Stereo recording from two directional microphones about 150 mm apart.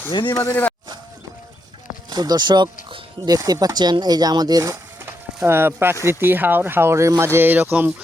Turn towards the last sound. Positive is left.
turn(degrees=-10)  # may be behind; listen again after turning